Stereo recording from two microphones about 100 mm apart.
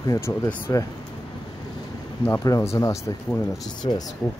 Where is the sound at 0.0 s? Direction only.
30° left (ahead or behind).